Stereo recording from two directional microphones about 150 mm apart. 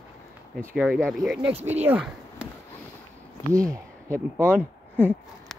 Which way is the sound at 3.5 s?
20° right (ahead or behind).